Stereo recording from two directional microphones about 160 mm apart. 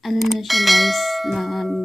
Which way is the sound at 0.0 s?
Centre (ahead or behind).